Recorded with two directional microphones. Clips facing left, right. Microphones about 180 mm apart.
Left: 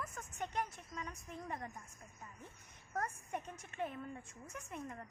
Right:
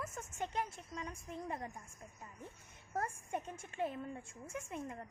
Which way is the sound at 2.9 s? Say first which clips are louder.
Right 2 dB; 30° right (ahead or behind).